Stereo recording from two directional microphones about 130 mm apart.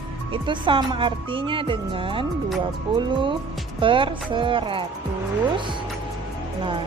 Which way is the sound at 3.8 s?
40° right (ahead or behind).